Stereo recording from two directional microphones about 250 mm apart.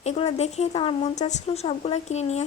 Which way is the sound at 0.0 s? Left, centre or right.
Left.